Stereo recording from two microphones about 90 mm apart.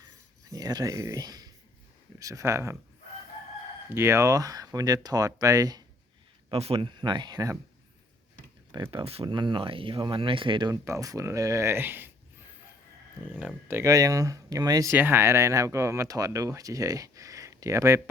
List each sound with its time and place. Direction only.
0.5 s speech: 45° right (ahead or behind)
3.9 s speech: 30° right (ahead or behind)
6.5 s speech: 90° right; by 7.5 s 50° right (ahead or behind)
8.7 s speech: 55° right (ahead or behind); by 9.2 s 75° right (ahead or behind)
9.2 s speech: 60° right (ahead or behind)
10.7 s speech: 35° right (ahead or behind)
13.7 s speech: 25° right (ahead or behind)
13.9 s speech: 40° right (ahead or behind)
14.9 s speech: 25° right (ahead or behind)